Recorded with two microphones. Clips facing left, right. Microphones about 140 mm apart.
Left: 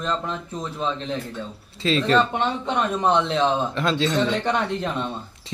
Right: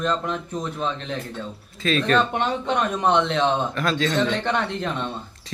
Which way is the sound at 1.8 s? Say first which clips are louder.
Left 1 dB; 25° left (ahead or behind).